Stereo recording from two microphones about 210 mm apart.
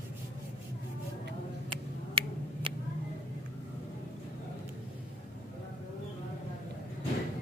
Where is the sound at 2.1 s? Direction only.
25° right (ahead or behind).